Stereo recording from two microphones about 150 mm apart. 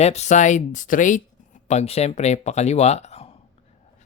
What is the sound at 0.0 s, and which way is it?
Speech, 45° left (ahead or behind).